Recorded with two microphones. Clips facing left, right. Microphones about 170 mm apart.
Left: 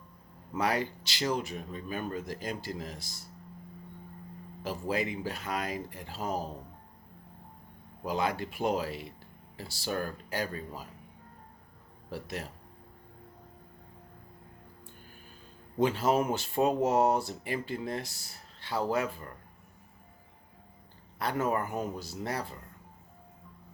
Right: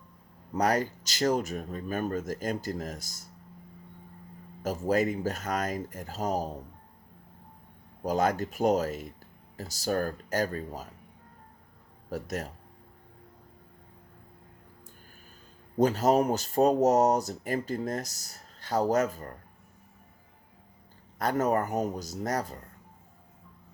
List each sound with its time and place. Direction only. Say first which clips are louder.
0.5 s speech: right 4 dB; 45° right (ahead or behind)
4.6 s speech: right 6 dB; 45° right (ahead or behind)
8.0 s speech: right 4 dB; 45° right (ahead or behind)
12.1 s speech: right 4 dB; 45° right (ahead or behind)
15.8 s speech: right 3 dB; 40° right (ahead or behind)
21.2 s speech: right 4 dB; 45° right (ahead or behind)